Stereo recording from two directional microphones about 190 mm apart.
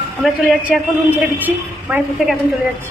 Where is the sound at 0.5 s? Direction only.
Centre (ahead or behind).